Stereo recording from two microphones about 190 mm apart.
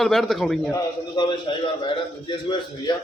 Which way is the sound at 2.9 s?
25° left (ahead or behind).